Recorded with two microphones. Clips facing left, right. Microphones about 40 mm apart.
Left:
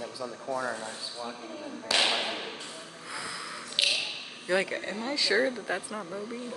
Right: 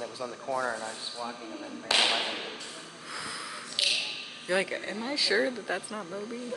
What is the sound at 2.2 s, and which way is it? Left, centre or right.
Speech, centre.